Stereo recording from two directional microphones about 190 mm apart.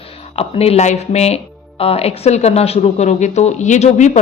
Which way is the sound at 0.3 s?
30° left (ahead or behind).